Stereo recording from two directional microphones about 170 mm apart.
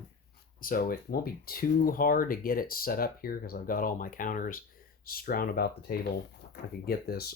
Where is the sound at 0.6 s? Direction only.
55° left (ahead or behind).